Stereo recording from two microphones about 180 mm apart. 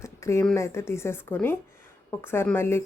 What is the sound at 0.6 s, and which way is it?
A woman's voice, 15° left (ahead or behind).